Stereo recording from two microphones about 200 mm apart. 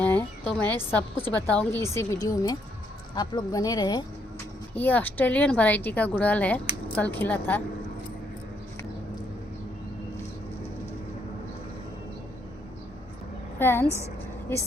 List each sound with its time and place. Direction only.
0.0 s a sound: 10° left (ahead or behind)
0.9 s a woman's voice: 10° left (ahead or behind)
4.7 s a woman's voice: 10° left (ahead or behind)
13.6 s a woman's voice: 10° left (ahead or behind)